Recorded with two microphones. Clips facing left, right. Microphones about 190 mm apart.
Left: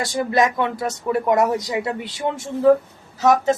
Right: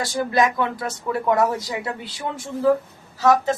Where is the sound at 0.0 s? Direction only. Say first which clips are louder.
Left 1 dB; 20° left (ahead or behind).